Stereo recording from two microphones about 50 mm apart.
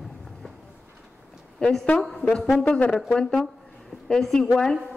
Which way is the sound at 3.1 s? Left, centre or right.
Centre.